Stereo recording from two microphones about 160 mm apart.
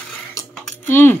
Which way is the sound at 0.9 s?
15° left (ahead or behind).